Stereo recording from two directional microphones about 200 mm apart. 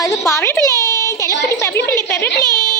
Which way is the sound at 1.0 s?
15° left (ahead or behind).